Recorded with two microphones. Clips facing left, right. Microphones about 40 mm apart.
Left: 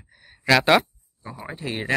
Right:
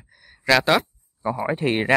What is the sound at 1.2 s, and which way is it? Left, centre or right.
Speech, right.